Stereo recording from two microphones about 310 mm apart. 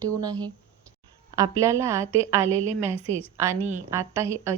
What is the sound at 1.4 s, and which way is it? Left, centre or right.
A woman's voice, centre.